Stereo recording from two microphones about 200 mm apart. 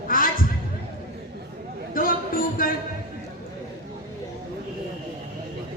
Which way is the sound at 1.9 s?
45° left (ahead or behind).